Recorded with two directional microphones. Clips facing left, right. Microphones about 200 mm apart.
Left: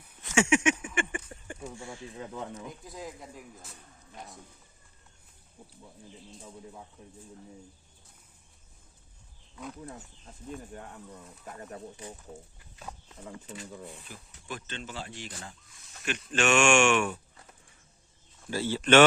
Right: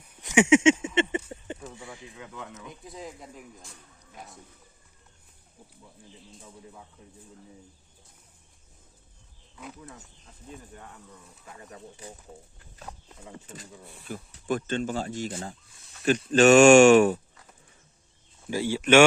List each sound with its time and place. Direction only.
0.2 s a sound: 15° right (ahead or behind)
2.1 s speech: 35° left (ahead or behind)
2.6 s speech: centre (ahead or behind)
13.5 s speech: 50° right (ahead or behind)
18.4 s speech: 15° right (ahead or behind)